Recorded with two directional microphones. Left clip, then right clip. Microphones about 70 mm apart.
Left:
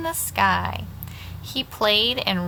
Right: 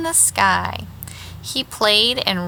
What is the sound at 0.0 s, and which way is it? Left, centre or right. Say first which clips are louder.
A woman's voice: right 4 dB; right.